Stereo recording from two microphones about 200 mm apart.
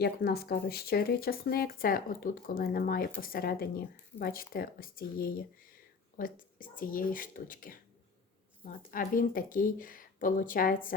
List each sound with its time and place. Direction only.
0.0 s speech: 50° left (ahead or behind)